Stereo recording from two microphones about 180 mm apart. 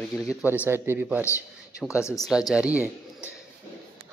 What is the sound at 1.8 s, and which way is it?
Speech, 5° left (ahead or behind).